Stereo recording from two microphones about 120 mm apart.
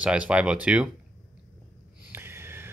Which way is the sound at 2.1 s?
20° right (ahead or behind).